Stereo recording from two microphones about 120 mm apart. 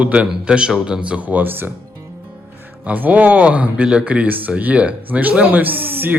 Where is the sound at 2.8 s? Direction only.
15° right (ahead or behind).